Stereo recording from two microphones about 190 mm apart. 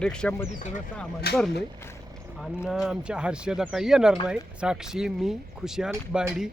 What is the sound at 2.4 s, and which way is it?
Speech, centre (ahead or behind).